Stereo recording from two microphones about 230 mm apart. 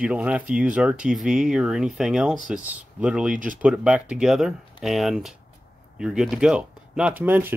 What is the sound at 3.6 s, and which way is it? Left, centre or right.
Speech, centre.